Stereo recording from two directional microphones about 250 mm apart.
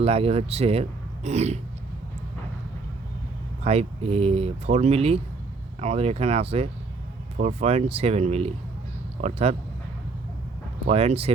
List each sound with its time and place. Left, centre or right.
0.0 s speech: right
3.6 s speech: right
10.8 s speech: right